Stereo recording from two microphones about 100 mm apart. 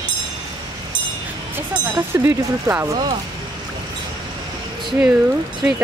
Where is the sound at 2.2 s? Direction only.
25° right (ahead or behind).